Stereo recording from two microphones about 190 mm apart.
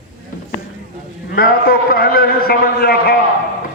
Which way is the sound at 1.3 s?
50° left (ahead or behind).